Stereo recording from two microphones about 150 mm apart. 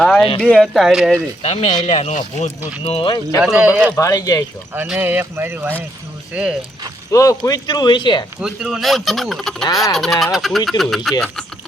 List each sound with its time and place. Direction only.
0.0 s speech: 5° left (ahead or behind)
1.4 s speech: 45° left (ahead or behind)
2.8 s speech: 35° left (ahead or behind)
3.4 s speech: 5° right (ahead or behind)
3.9 s speech: 20° left (ahead or behind)
4.9 s speech: 10° right (ahead or behind)
7.1 s speech: 20° left (ahead or behind)
8.4 s speech: 5° right (ahead or behind)